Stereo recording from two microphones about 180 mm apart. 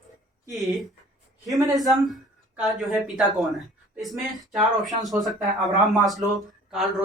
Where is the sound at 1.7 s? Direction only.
Centre (ahead or behind).